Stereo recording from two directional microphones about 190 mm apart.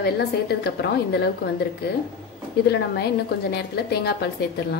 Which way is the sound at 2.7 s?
60° left (ahead or behind).